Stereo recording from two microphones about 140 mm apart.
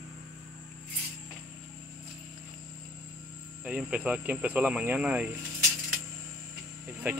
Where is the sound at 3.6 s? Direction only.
10° right (ahead or behind).